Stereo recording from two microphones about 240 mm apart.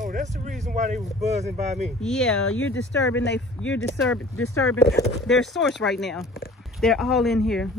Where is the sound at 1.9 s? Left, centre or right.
Centre.